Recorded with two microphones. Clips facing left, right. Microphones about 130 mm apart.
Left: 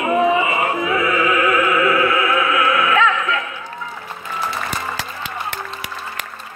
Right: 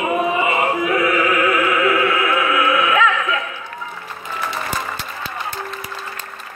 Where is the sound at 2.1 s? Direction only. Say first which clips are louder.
Even; 25° left (ahead or behind).